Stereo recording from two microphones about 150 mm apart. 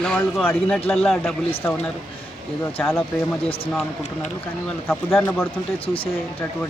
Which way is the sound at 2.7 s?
15° left (ahead or behind).